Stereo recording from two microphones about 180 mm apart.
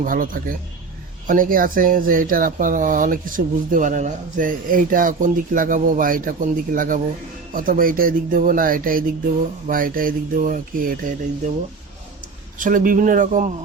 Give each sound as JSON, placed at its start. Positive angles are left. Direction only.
{"t": 0.0, "sound": "speech", "side_deg": -50}
{"t": 12.5, "sound": "speech", "side_deg": -45}